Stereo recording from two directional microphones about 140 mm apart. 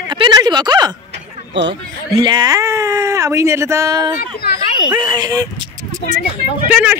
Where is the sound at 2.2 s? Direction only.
30° right (ahead or behind).